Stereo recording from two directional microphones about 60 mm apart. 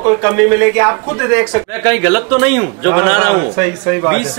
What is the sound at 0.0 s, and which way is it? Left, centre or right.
Speech, right.